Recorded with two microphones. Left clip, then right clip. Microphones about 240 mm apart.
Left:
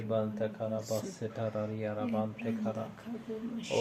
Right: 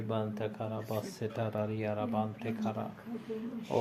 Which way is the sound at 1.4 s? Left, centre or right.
Right.